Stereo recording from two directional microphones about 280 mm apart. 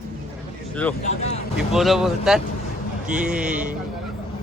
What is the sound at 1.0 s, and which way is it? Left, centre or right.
Speech, left.